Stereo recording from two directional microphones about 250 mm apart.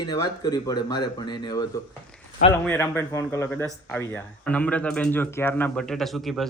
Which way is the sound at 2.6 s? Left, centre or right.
Centre.